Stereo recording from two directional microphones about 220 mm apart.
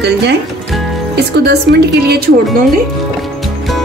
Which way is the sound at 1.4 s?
50° right (ahead or behind).